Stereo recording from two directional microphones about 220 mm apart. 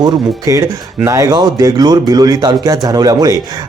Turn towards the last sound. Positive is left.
turn(degrees=-15)  # may be behind; listen again after turning